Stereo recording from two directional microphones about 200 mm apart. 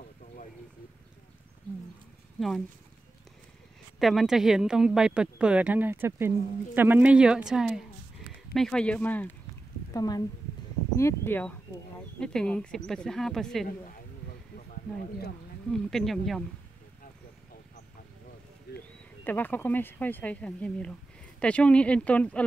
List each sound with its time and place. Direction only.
4.0 s speech: centre (ahead or behind)
9.9 s speech: 20° left (ahead or behind); by 13.7 s centre (ahead or behind)
14.7 s speech: 50° left (ahead or behind)
15.7 s speech: centre (ahead or behind)
18.7 s a sound: 55° left (ahead or behind)
19.2 s speech: 10° left (ahead or behind)